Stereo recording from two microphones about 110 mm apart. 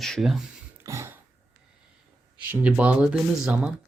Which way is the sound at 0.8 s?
25° right (ahead or behind).